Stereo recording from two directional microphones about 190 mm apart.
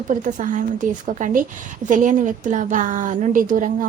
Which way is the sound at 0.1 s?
40° right (ahead or behind).